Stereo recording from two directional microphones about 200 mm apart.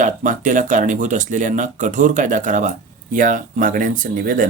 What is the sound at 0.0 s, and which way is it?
Speech, 40° right (ahead or behind).